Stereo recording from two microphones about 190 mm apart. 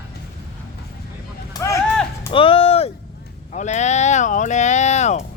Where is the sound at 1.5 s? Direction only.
15° left (ahead or behind).